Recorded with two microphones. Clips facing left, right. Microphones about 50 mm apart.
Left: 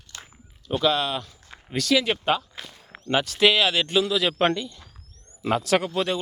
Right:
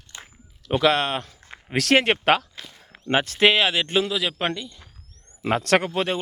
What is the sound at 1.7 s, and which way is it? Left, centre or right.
Speech, right.